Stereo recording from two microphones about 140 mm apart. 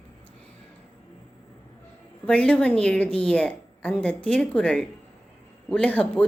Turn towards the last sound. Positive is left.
turn(degrees=10)  # may be behind; listen again after turning